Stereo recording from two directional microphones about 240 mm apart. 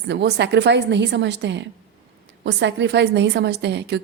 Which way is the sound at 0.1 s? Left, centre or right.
Right.